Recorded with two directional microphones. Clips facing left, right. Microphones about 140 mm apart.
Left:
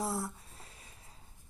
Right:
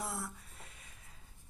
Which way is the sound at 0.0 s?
30° left (ahead or behind).